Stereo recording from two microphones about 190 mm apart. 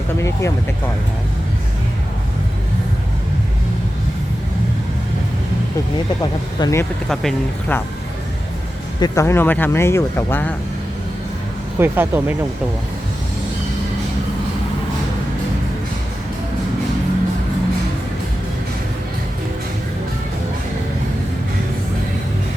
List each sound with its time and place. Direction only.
0.2 s speech: 15° left (ahead or behind)
6.6 s speech: 15° left (ahead or behind)
7.1 s speech: centre (ahead or behind)
9.0 s speech: 15° left (ahead or behind)
11.8 s speech: 10° right (ahead or behind)